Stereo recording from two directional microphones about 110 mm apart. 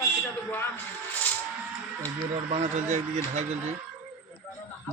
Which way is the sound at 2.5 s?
90° right.